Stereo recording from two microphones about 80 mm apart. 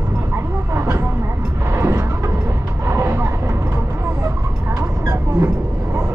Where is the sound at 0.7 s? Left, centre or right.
Right.